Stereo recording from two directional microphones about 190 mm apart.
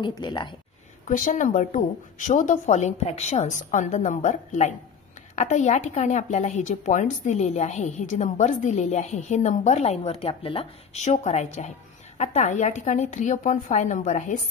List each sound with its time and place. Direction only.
0.0 s speech: 25° left (ahead or behind)
1.0 s a woman's voice: 45° left (ahead or behind)